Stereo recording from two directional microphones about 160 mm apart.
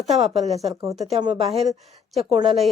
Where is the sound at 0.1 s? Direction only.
40° right (ahead or behind).